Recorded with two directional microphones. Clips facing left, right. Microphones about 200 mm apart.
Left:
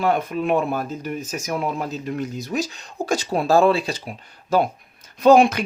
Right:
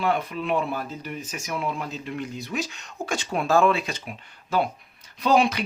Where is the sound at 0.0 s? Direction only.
45° left (ahead or behind).